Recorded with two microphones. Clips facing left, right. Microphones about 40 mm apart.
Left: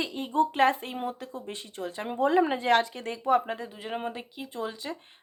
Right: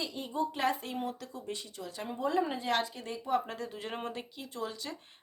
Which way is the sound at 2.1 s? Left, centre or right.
Left.